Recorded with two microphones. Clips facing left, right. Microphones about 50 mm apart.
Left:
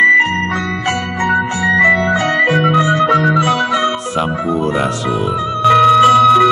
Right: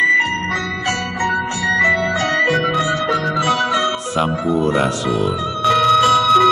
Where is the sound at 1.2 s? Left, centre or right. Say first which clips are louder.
Left 5 dB; centre.